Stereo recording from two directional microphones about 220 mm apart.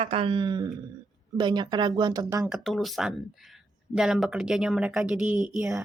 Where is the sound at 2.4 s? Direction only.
Centre (ahead or behind).